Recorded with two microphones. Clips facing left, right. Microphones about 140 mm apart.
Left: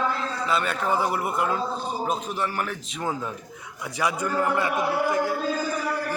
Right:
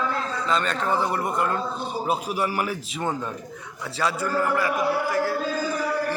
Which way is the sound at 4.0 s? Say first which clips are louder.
Even; 20° left (ahead or behind).